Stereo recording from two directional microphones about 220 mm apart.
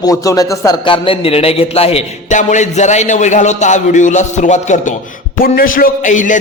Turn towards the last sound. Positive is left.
turn(degrees=35)  # may be behind; listen again after turning